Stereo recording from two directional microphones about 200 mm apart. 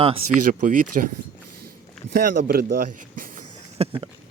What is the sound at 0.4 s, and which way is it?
Speech, 40° right (ahead or behind).